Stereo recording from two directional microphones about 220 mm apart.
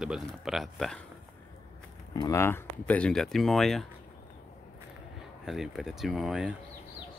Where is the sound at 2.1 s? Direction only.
15° left (ahead or behind).